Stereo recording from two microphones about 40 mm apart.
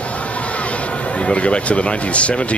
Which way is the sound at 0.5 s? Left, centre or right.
Left.